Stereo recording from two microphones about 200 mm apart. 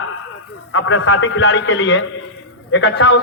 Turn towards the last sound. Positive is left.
turn(degrees=65)  # may be behind; listen again after turning